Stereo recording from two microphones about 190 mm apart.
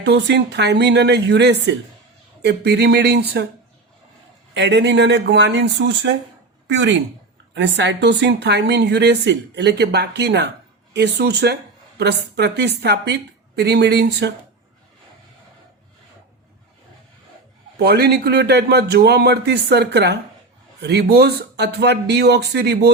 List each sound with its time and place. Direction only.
0.0 s a woman's voice: 60° right (ahead or behind)
4.5 s a woman's voice: 65° right (ahead or behind)
17.7 s a woman's voice: 60° right (ahead or behind)